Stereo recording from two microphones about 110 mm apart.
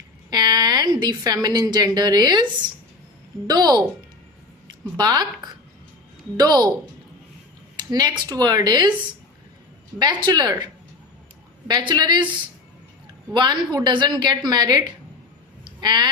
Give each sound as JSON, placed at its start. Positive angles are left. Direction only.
{"t": 0.3, "sound": "a woman's voice", "side_deg": -40}
{"t": 4.9, "sound": "a woman's voice", "side_deg": -40}
{"t": 6.3, "sound": "a woman's voice", "side_deg": -40}
{"t": 7.8, "sound": "a sound", "side_deg": -40}
{"t": 8.3, "sound": "a woman's voice", "side_deg": -35}
{"t": 10.0, "sound": "a woman's voice", "side_deg": -40}
{"t": 11.7, "sound": "a woman's voice", "side_deg": -45}
{"t": 13.3, "sound": "a woman's voice", "side_deg": -40}